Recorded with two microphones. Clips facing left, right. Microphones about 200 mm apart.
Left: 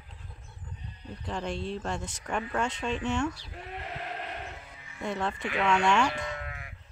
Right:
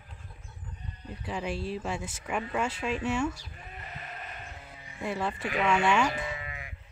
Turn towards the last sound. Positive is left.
turn(degrees=0)  # may be behind; listen again after turning